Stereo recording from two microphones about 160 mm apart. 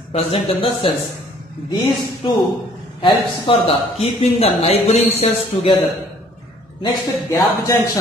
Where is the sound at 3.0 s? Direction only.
35° left (ahead or behind).